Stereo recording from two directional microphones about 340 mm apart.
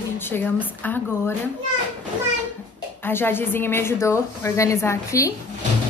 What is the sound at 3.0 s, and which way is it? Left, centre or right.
A woman's voice, centre.